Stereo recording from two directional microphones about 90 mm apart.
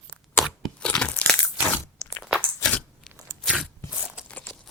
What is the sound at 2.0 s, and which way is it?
Biting, 40° left (ahead or behind).